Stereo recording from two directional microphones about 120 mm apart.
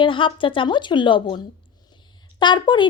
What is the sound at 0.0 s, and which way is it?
Speech, 45° left (ahead or behind).